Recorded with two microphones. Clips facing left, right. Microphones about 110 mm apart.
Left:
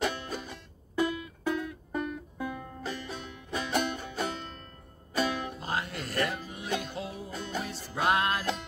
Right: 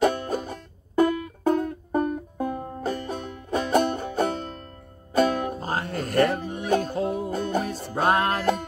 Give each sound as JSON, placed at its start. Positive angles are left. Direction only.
{"t": 0.0, "sound": "music", "side_deg": -45}